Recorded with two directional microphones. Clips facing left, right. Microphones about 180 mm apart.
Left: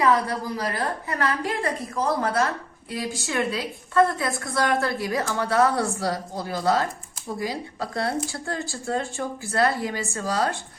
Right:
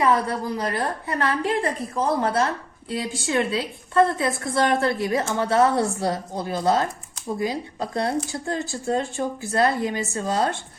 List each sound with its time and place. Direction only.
0.0 s a woman's voice: 25° right (ahead or behind)